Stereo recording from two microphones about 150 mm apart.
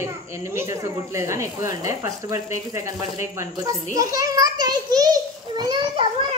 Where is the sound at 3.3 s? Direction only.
20° right (ahead or behind).